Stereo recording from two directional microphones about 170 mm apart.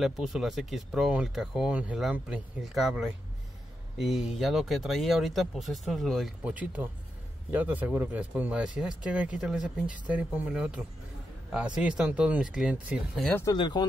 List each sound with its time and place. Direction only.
0.0 s speech: centre (ahead or behind)
12.0 s speech: 5° right (ahead or behind)
13.4 s speech: 25° left (ahead or behind)